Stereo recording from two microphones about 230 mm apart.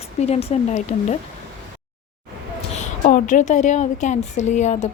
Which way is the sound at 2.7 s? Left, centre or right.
Left.